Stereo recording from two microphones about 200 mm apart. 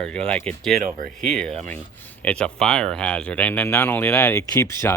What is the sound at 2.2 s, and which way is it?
Speech, 5° left (ahead or behind).